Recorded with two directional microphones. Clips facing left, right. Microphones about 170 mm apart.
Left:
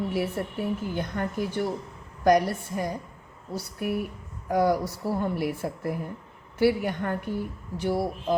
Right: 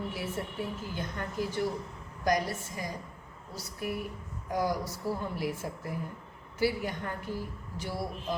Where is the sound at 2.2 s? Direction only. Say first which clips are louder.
Left 8 dB; 60° left (ahead or behind).